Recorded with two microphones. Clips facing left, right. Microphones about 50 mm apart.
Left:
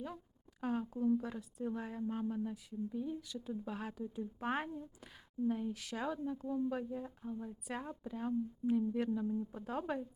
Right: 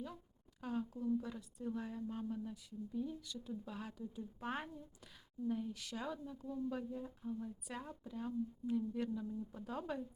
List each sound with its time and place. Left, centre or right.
0.6 s speech: left
5.7 s a woman's voice: centre
6.1 s speech: left